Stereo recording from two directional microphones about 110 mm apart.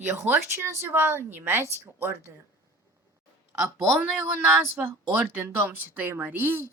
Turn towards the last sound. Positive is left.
turn(degrees=-20)  # may be behind; listen again after turning